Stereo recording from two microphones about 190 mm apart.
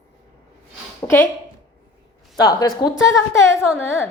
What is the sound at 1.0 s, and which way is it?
Speech, 15° left (ahead or behind).